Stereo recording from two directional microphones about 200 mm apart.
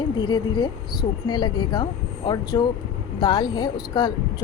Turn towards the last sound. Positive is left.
turn(degrees=20)  # may be behind; listen again after turning